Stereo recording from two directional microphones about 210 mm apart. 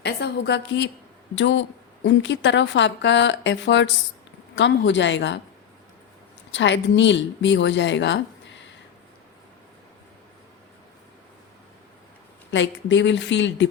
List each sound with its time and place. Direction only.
0.0 s a woman's voice: 55° left (ahead or behind)
6.5 s a woman's voice: 60° left (ahead or behind)
12.5 s a woman's voice: 60° left (ahead or behind)